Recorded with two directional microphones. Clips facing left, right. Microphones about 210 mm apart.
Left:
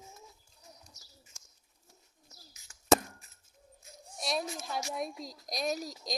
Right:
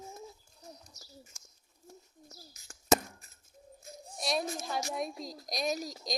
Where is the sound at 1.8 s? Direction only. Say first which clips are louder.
Right 11 dB; 45° right (ahead or behind).